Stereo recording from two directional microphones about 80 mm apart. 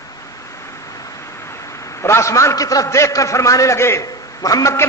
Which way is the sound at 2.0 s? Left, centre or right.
Left.